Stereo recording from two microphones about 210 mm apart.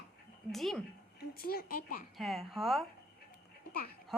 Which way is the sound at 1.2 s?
45° left (ahead or behind).